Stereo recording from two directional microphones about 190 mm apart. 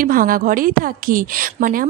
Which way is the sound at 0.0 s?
45° right (ahead or behind).